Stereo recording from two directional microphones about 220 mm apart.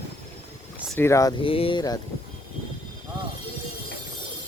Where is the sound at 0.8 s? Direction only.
10° left (ahead or behind).